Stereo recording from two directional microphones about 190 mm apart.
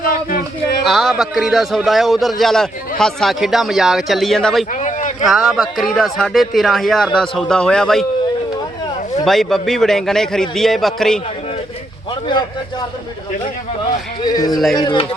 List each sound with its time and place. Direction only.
0.0 s a sound: 45° left (ahead or behind)
0.9 s a man's voice: centre (ahead or behind)
4.7 s a sound: 40° left (ahead or behind)
5.2 s a man's voice: centre (ahead or behind)
9.2 s a man's voice: centre (ahead or behind)
14.3 s speech: 20° left (ahead or behind)